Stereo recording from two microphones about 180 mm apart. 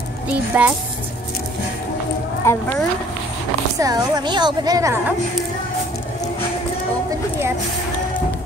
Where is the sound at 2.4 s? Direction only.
15° left (ahead or behind).